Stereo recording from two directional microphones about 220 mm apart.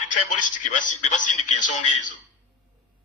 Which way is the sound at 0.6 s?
35° left (ahead or behind).